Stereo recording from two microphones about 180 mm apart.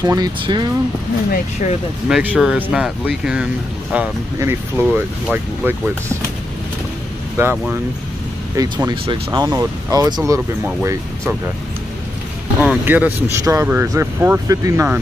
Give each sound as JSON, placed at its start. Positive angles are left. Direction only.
{"t": 0.0, "sound": "speech", "side_deg": -20}
{"t": 1.3, "sound": "speech", "side_deg": 40}
{"t": 2.0, "sound": "speech", "side_deg": -5}
{"t": 3.9, "sound": "speech", "side_deg": -10}
{"t": 7.3, "sound": "speech", "side_deg": -10}
{"t": 12.5, "sound": "speech", "side_deg": -10}